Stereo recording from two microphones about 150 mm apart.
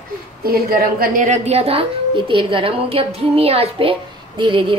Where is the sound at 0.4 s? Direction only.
85° right.